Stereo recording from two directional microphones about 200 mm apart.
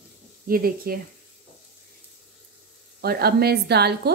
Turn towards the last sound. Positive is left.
turn(degrees=-55)  # may be behind; listen again after turning